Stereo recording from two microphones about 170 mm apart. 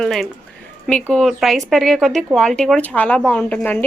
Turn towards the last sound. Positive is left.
turn(degrees=10)  # may be behind; listen again after turning